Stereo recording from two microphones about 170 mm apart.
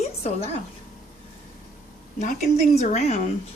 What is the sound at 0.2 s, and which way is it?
Speech, 35° left (ahead or behind).